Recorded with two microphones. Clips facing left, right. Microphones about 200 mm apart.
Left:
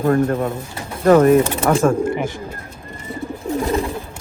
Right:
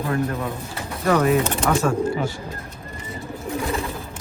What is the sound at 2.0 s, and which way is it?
Speech, 20° left (ahead or behind).